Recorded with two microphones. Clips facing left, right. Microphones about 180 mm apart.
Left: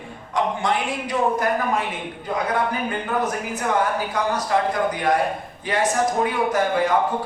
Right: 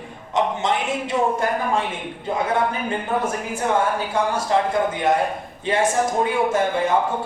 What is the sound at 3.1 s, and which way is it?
A man's voice, 25° right (ahead or behind).